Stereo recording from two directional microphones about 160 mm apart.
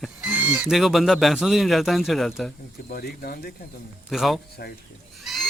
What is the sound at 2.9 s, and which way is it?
Speech, 75° left (ahead or behind).